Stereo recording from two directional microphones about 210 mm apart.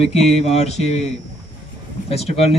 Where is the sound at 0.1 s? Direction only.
30° left (ahead or behind).